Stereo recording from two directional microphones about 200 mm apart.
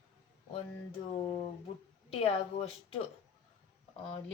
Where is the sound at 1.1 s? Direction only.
15° left (ahead or behind).